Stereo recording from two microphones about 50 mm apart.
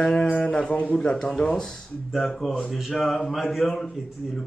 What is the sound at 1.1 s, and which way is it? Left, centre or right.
Speech, centre.